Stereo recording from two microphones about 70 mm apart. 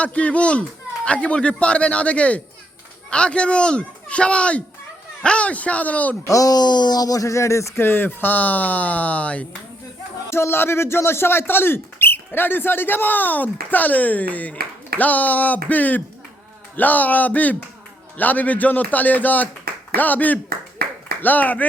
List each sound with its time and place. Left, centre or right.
0.0 s speech: centre
6.2 s speech: left
10.2 s speech: left